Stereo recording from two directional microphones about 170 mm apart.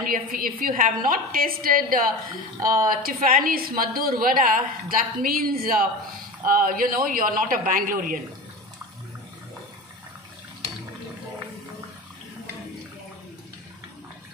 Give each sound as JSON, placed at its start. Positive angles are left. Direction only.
{"t": 0.0, "sound": "a woman's voice", "side_deg": -55}